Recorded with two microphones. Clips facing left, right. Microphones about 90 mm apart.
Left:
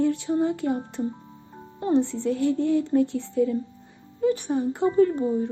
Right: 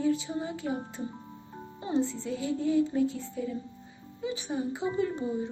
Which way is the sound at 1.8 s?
65° left (ahead or behind).